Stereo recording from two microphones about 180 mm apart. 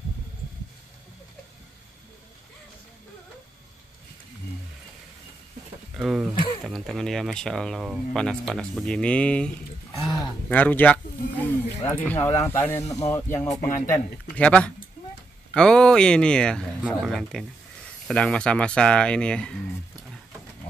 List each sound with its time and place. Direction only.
5.9 s speech: centre (ahead or behind)
6.3 s a sound: 25° left (ahead or behind)
6.6 s speech: centre (ahead or behind)
10.5 s speech: 10° left (ahead or behind)